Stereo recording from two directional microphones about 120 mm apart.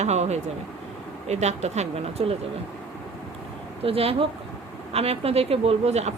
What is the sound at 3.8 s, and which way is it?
Speech, 55° right (ahead or behind).